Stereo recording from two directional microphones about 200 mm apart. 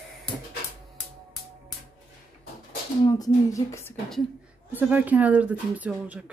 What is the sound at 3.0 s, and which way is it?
Speech, 20° left (ahead or behind).